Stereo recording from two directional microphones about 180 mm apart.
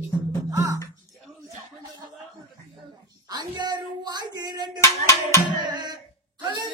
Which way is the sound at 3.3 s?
25° right (ahead or behind).